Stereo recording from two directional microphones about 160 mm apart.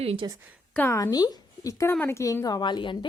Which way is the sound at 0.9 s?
20° left (ahead or behind).